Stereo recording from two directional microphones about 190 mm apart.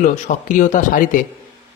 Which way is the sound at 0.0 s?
40° left (ahead or behind).